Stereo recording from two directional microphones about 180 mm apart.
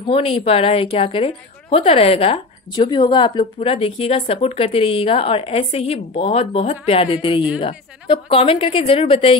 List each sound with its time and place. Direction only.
0.1 s a woman's voice: 30° left (ahead or behind)